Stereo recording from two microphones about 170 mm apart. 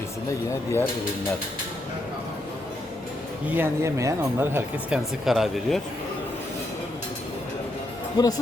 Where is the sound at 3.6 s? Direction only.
15° right (ahead or behind); by 5.8 s centre (ahead or behind).